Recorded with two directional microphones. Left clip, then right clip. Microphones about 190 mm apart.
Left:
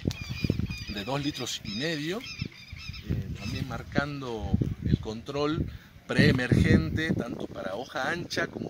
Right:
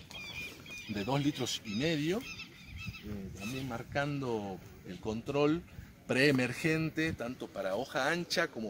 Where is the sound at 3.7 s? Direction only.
10° right (ahead or behind).